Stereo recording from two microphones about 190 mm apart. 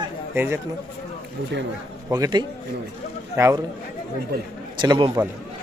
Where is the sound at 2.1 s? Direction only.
20° right (ahead or behind).